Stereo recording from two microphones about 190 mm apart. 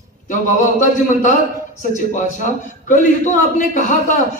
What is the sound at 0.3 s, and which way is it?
A man's voice, 40° left (ahead or behind).